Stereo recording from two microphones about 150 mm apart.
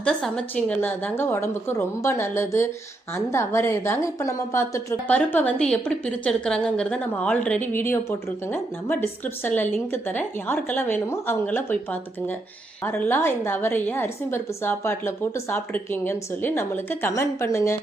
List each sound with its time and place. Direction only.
0.0 s a woman's voice: 5° left (ahead or behind)